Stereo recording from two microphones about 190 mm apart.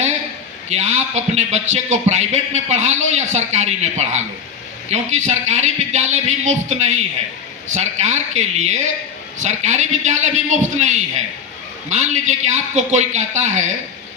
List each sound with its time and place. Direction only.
0.7 s a man's voice: 35° right (ahead or behind)